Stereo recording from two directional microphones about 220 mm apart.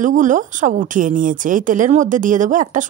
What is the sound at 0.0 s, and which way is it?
Speech, 35° right (ahead or behind).